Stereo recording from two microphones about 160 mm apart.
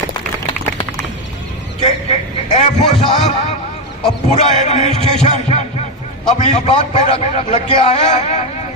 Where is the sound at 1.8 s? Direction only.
45° left (ahead or behind).